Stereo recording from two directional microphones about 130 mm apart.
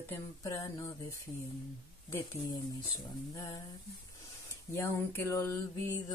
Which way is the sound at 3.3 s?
30° left (ahead or behind).